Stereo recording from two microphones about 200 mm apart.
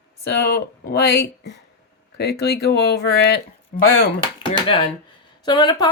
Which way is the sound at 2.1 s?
55° left (ahead or behind).